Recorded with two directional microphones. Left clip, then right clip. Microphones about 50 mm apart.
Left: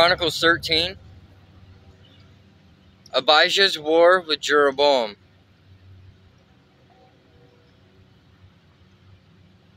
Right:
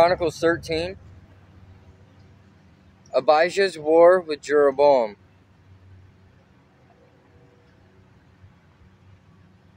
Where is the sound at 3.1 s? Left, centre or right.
Right.